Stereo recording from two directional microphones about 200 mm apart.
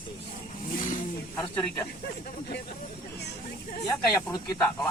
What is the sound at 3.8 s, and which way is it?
Speech, 20° left (ahead or behind).